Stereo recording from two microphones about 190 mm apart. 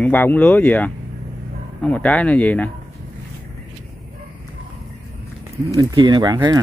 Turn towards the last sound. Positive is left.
turn(degrees=-20)  # may be behind; listen again after turning